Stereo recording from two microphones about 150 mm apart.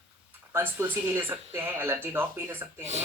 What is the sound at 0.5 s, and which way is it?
Speech, 15° right (ahead or behind).